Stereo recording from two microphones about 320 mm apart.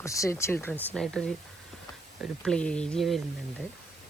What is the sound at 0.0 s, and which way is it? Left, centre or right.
Speech, centre.